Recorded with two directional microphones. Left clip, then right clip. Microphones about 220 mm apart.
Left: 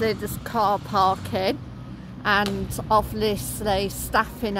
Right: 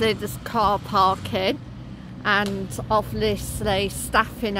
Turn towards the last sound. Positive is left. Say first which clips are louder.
# right 2 dB
turn(degrees=-5)  # may be behind; listen again after turning